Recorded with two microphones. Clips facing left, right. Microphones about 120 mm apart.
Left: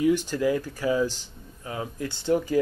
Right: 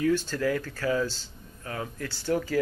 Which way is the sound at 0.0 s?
15° left (ahead or behind).